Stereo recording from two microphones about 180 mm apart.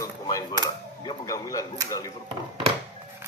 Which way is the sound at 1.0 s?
20° left (ahead or behind).